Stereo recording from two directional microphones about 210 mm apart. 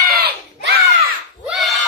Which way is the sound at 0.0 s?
50° right (ahead or behind).